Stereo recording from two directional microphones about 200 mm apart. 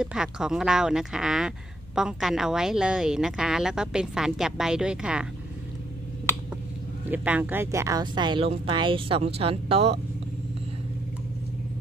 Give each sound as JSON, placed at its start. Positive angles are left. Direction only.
{"t": 0.0, "sound": "a woman's voice", "side_deg": -5}
{"t": 7.1, "sound": "speech", "side_deg": -10}